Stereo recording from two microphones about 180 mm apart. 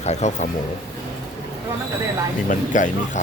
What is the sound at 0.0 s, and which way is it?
Speech, 40° left (ahead or behind).